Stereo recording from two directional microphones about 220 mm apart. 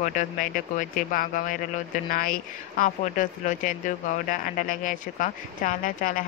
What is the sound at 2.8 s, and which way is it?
Speech, 35° left (ahead or behind).